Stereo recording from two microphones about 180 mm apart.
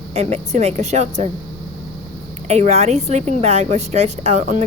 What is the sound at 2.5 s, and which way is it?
A woman's voice, 40° right (ahead or behind).